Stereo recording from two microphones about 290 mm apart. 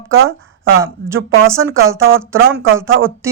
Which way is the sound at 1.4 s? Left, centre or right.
Centre.